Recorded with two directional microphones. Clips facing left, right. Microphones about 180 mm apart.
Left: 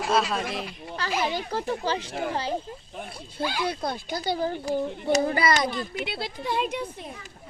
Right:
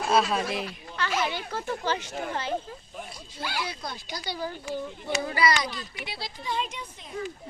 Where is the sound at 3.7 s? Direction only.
55° left (ahead or behind).